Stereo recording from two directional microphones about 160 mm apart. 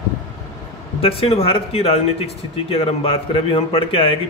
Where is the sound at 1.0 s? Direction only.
35° left (ahead or behind).